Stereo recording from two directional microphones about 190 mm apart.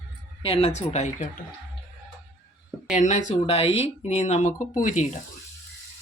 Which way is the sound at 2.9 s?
40° left (ahead or behind).